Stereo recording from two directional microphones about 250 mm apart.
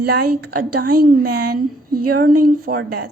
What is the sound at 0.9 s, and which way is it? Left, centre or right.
Speech, right.